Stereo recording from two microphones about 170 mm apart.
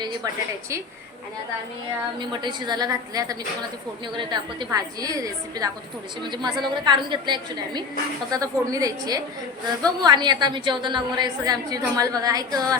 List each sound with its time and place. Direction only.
2.1 s a woman's voice: 25° right (ahead or behind)